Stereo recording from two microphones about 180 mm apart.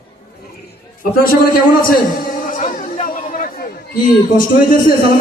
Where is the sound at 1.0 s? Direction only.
55° left (ahead or behind).